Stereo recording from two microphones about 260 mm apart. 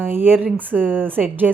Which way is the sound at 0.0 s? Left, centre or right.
Centre.